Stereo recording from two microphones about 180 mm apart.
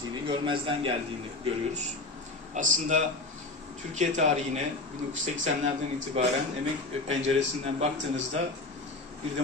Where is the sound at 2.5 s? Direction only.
45° right (ahead or behind).